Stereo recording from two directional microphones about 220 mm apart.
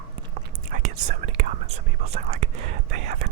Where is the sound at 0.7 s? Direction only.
35° right (ahead or behind).